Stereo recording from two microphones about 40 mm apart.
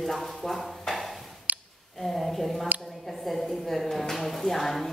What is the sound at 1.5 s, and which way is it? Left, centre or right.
Clicking, right.